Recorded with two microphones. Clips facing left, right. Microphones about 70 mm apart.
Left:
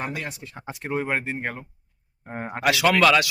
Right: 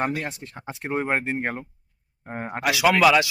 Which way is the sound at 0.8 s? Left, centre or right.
Right.